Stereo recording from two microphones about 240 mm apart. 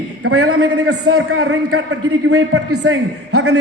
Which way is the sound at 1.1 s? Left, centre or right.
Right.